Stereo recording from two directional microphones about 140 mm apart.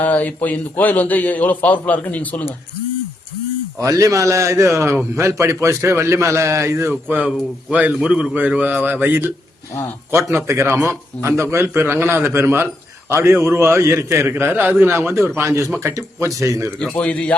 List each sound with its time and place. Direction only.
0.0 s a man's voice: 10° left (ahead or behind)
3.8 s a man's voice: 25° right (ahead or behind)
16.7 s a man's voice: 5° left (ahead or behind)